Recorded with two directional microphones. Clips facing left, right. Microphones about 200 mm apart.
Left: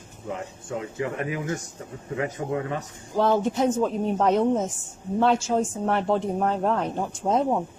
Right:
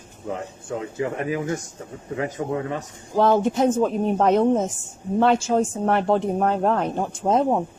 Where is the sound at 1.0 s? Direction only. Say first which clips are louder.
Right 4 dB; 30° right (ahead or behind).